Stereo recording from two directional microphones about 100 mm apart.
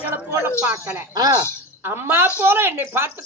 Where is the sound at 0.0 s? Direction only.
20° right (ahead or behind).